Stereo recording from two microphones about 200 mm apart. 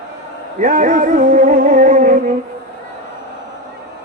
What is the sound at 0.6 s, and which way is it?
Speech, 40° right (ahead or behind).